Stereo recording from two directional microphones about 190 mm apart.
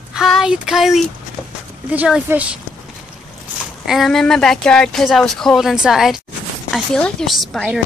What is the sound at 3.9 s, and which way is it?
A woman's voice, centre (ahead or behind).